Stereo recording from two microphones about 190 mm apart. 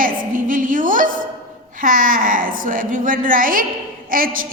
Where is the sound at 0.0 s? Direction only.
45° right (ahead or behind).